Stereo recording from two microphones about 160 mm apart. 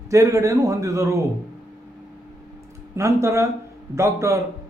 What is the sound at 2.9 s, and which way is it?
A man's voice, 20° right (ahead or behind).